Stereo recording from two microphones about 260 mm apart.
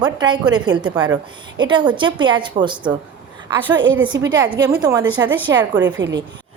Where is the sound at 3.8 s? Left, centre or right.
Right.